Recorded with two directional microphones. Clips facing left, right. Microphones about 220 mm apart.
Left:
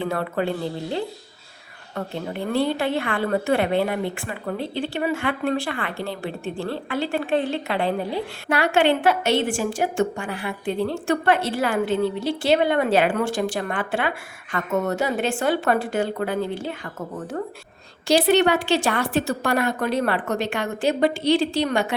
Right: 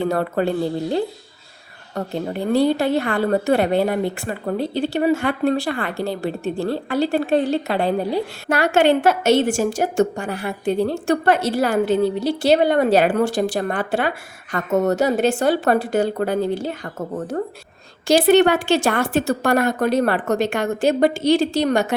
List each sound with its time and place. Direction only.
0.0 s a woman's voice: 40° right (ahead or behind)